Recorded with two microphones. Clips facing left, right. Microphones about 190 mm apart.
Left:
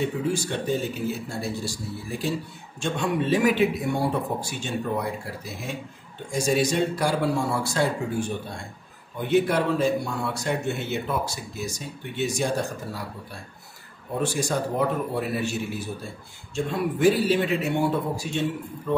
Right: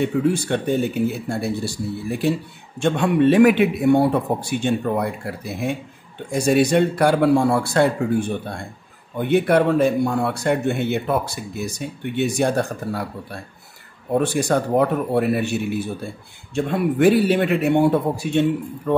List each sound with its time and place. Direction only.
0.0 s speech: 60° right (ahead or behind)